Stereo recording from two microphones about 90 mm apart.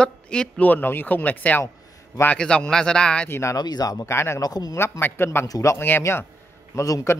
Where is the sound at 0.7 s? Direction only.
20° left (ahead or behind).